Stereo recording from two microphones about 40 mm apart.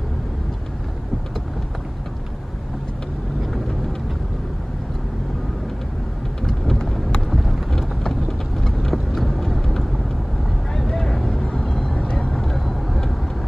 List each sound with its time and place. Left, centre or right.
6.4 s vehicle: centre